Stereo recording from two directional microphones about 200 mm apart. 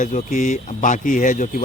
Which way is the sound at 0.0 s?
40° left (ahead or behind).